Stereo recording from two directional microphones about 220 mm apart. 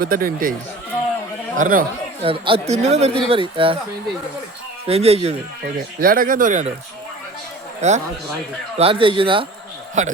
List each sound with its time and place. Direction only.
0.0 s speech: 40° right (ahead or behind)
1.5 s speech: 40° right (ahead or behind)
2.2 s speech: 25° right (ahead or behind)
4.9 s speech: 25° right (ahead or behind)
6.0 s speech: 40° right (ahead or behind)
7.8 s speech: 30° right (ahead or behind)
10.0 s speech: 35° right (ahead or behind)